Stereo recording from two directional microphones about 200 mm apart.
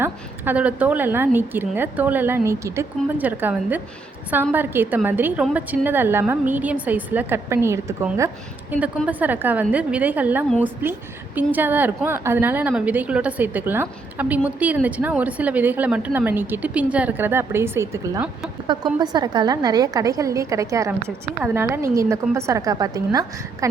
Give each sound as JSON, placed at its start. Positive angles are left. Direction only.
{"t": 0.0, "sound": "a woman's voice", "side_deg": -10}